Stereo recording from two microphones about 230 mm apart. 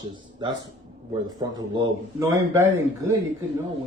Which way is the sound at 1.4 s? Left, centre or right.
Centre.